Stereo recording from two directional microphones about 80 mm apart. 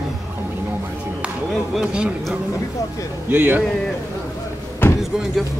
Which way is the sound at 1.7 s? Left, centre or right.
Centre.